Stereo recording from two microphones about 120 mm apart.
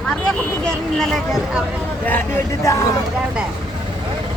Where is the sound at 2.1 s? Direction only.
20° left (ahead or behind).